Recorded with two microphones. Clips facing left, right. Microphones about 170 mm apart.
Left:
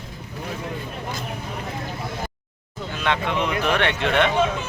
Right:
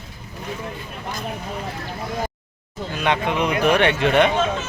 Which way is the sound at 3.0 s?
15° right (ahead or behind).